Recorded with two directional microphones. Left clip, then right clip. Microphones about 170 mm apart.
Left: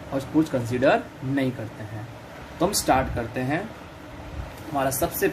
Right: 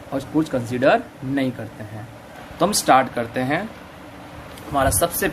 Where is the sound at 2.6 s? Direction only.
35° right (ahead or behind).